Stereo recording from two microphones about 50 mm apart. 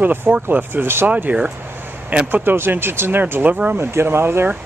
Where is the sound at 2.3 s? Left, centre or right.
Right.